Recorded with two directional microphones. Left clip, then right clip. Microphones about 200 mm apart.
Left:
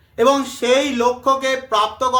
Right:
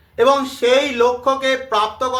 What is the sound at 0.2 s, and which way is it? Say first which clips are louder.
Speech: right 1 dB; 20° left (ahead or behind).